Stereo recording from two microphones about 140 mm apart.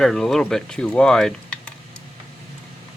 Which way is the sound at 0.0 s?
5° left (ahead or behind).